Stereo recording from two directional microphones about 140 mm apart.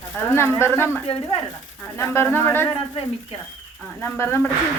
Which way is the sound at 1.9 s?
15° left (ahead or behind).